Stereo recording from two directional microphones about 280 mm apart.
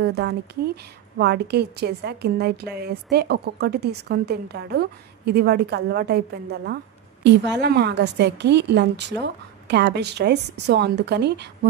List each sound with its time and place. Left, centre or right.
0.0 s a woman's voice: right